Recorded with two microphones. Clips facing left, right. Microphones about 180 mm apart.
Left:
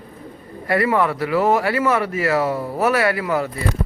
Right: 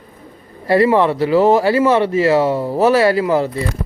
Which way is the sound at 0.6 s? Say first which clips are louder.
Right 6 dB; 30° right (ahead or behind).